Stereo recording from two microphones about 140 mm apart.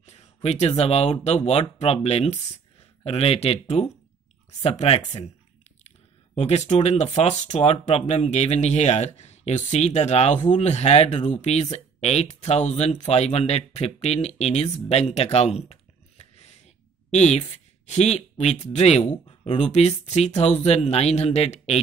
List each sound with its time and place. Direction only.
0.0 s speech: 50° left (ahead or behind)